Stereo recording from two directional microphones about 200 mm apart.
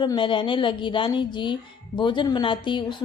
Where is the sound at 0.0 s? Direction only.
25° left (ahead or behind).